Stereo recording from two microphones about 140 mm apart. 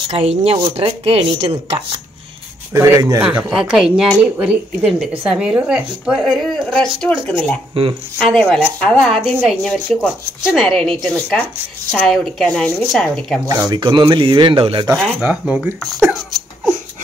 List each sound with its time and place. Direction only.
0.1 s speech: 50° right (ahead or behind)
2.7 s speech: 25° right (ahead or behind)
3.2 s a woman's voice: 5° right (ahead or behind)
6.5 s a woman's voice: 5° left (ahead or behind)
13.5 s speech: 30° right (ahead or behind)
15.2 s a woman's voice: 10° right (ahead or behind)
15.9 s a woman's voice: centre (ahead or behind)